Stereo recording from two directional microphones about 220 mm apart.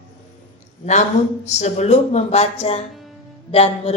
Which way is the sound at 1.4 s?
30° left (ahead or behind).